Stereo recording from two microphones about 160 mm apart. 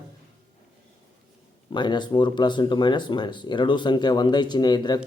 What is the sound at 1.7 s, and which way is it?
Speech, 30° left (ahead or behind).